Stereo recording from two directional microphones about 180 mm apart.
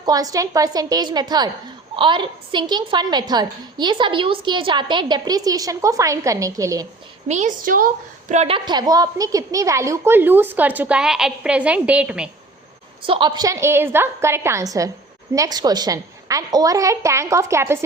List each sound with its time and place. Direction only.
0.0 s a woman's voice: 20° right (ahead or behind)
7.3 s a woman's voice: 40° right (ahead or behind)
8.3 s a woman's voice: 35° right (ahead or behind); by 12.3 s 5° right (ahead or behind)
13.0 s a woman's voice: 30° right (ahead or behind)